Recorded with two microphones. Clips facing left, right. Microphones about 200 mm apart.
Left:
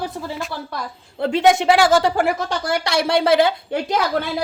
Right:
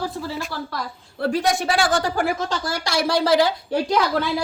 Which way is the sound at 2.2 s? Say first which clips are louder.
Left 2 dB; 60° left (ahead or behind).